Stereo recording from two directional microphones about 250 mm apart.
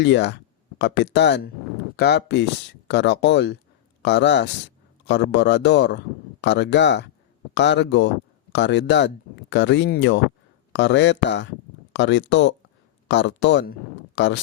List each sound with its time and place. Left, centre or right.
0.0 s speech: left